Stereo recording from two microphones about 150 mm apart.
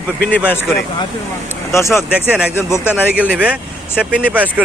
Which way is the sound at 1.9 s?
10° right (ahead or behind).